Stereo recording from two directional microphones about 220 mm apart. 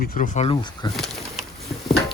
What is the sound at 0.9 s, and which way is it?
Pigeon, centre (ahead or behind).